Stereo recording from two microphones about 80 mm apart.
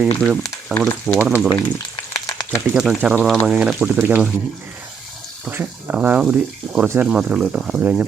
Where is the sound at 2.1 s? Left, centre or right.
Left.